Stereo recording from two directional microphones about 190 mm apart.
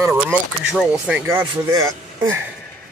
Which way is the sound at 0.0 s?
10° right (ahead or behind).